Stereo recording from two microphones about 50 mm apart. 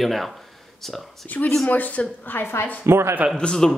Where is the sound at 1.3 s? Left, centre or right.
Left.